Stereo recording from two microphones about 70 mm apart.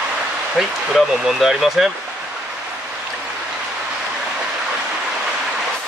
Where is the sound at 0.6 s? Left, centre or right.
Centre.